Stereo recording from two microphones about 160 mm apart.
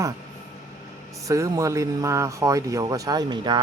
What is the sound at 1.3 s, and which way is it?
Speech, 20° right (ahead or behind).